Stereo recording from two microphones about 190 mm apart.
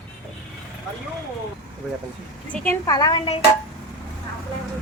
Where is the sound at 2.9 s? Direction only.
20° left (ahead or behind).